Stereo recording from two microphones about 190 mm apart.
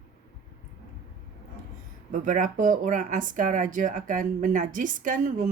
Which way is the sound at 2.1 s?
40° right (ahead or behind).